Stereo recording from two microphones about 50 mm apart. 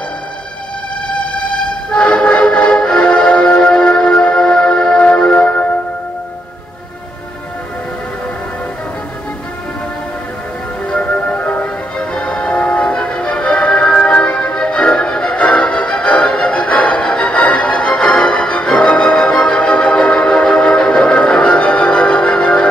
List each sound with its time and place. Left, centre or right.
1.0 s train: left
3.8 s music: centre
10.9 s music: left